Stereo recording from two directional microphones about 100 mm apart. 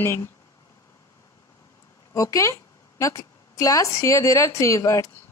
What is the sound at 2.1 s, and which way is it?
A woman's voice, 35° left (ahead or behind).